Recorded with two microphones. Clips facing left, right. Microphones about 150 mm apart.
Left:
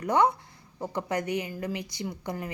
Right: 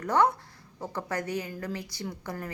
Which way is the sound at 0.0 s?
15° left (ahead or behind).